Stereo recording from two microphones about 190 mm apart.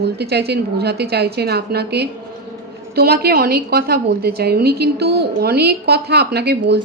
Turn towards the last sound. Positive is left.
turn(degrees=-60)  # may be behind; listen again after turning